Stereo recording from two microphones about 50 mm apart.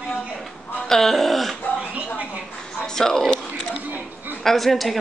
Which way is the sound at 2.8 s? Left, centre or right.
Centre.